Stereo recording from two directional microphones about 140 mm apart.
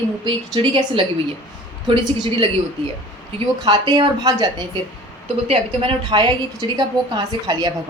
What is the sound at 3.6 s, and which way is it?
Speech, 35° right (ahead or behind).